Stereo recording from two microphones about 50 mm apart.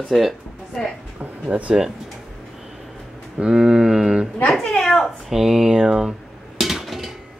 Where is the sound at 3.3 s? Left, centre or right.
Centre.